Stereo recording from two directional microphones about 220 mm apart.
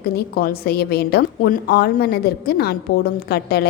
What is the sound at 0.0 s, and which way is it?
A woman's voice, 45° left (ahead or behind).